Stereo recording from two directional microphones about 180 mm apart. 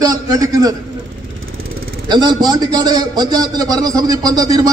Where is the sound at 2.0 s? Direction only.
25° right (ahead or behind).